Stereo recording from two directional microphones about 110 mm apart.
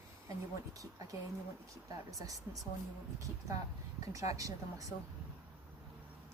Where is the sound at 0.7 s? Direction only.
30° right (ahead or behind).